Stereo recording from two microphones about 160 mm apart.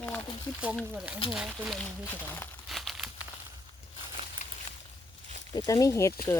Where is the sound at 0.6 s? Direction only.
10° right (ahead or behind).